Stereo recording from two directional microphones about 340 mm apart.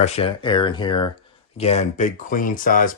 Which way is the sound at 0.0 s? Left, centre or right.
Centre.